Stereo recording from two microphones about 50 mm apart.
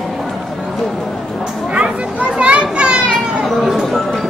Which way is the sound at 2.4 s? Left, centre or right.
Right.